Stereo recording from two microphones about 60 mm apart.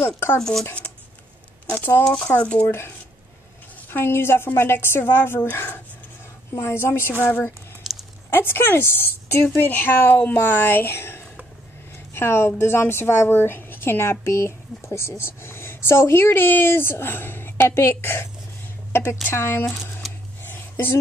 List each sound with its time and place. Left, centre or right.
0.4 s speech: centre
2.0 s speech: centre
3.9 s a woman's voice: left
7.8 s a sound: centre
8.3 s a woman's voice: left
20.0 s a sound: centre